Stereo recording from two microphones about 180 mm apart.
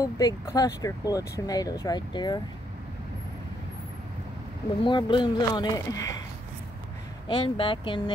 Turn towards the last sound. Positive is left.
turn(degrees=30)  # may be behind; listen again after turning